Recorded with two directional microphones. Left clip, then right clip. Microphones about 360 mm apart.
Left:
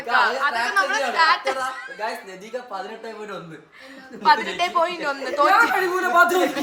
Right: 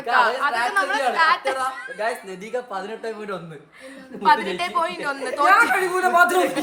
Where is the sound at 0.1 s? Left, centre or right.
Centre.